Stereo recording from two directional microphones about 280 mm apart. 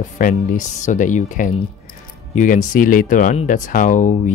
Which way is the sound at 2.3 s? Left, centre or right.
Left.